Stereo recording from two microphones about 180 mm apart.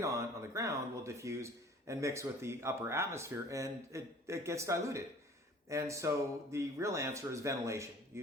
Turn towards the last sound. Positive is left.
turn(degrees=-15)  # may be behind; listen again after turning